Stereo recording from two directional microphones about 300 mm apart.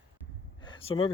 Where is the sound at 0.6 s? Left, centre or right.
Centre.